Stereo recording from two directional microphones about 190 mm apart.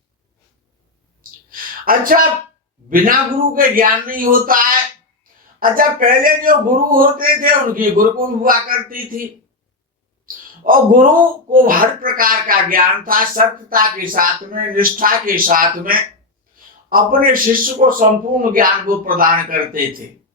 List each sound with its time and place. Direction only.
1.5 s a sound: 50° right (ahead or behind)
2.9 s speech: 50° right (ahead or behind)
10.6 s speech: 45° right (ahead or behind)